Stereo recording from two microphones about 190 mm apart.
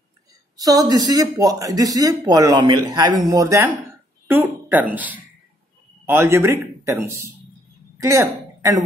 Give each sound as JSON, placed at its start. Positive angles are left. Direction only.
{"t": 0.6, "sound": "a man's voice", "side_deg": -20}